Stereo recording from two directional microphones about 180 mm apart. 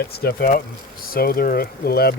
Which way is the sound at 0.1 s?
60° left (ahead or behind).